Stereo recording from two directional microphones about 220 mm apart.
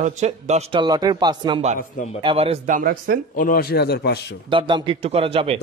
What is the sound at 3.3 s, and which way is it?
Speech, 40° left (ahead or behind).